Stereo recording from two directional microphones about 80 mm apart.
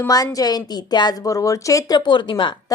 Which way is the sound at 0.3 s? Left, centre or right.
Left.